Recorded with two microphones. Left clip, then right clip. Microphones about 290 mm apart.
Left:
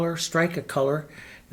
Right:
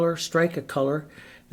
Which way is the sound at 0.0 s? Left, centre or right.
Right.